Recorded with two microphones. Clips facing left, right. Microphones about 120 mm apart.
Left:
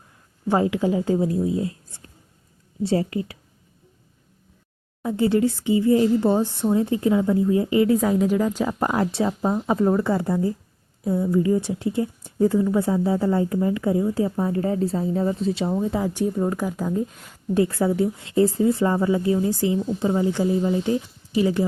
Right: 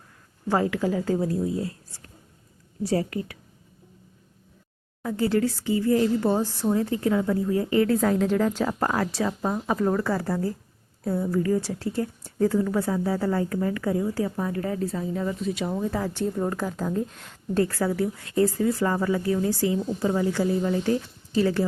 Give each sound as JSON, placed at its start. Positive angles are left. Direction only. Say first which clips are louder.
{"t": 0.4, "sound": "speech", "louder": "left 3 dB", "side_deg": 20}
{"t": 2.8, "sound": "speech", "louder": "left 3 dB", "side_deg": 25}
{"t": 5.0, "sound": "speech", "louder": "left 4 dB", "side_deg": 20}
{"t": 15.7, "sound": "speech", "louder": "left 4 dB", "side_deg": 20}
{"t": 17.6, "sound": "a woman's voice", "louder": "left 3 dB", "side_deg": 20}